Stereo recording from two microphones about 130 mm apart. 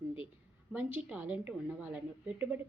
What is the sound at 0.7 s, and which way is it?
A woman's voice, 10° right (ahead or behind).